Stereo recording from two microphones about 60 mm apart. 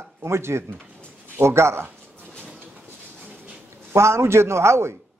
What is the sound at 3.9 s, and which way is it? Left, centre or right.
A man's voice, right.